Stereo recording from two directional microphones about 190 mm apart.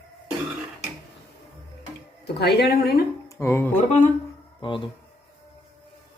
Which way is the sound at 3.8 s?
40° left (ahead or behind).